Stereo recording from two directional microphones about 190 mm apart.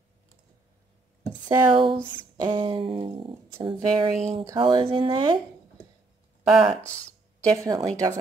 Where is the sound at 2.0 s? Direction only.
25° left (ahead or behind).